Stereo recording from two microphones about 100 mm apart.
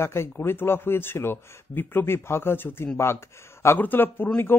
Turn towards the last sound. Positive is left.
turn(degrees=20)  # may be behind; listen again after turning